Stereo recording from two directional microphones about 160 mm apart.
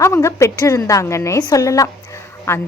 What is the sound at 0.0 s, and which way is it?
A woman's voice, 20° left (ahead or behind).